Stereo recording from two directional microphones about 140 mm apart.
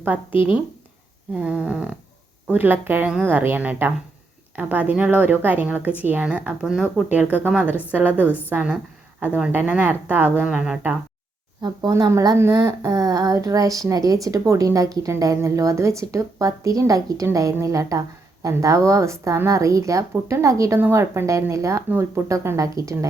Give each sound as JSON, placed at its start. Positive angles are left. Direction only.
{"t": 1.3, "sound": "speech", "side_deg": -10}
{"t": 11.6, "sound": "a woman's voice", "side_deg": -30}